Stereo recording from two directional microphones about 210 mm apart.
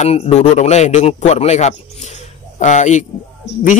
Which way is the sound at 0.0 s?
30° left (ahead or behind).